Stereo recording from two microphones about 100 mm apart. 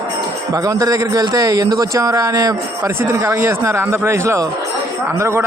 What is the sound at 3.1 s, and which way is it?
A man's voice, 25° right (ahead or behind).